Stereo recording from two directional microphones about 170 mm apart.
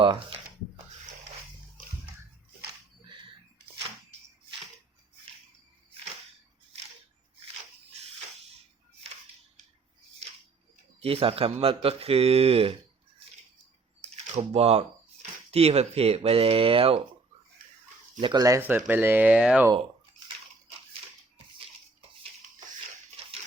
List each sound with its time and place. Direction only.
0.0 s speech: 30° right (ahead or behind)
11.0 s a man's voice: 35° right (ahead or behind)
14.0 s speech: 40° right (ahead or behind)
18.2 s speech: 25° right (ahead or behind); by 19.6 s 5° right (ahead or behind)
19.7 s bathtub: 30° right (ahead or behind)